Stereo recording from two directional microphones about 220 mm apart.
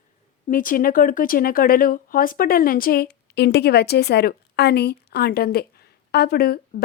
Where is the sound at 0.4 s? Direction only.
40° left (ahead or behind).